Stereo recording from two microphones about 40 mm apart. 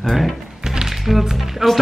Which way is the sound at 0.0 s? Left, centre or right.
Centre.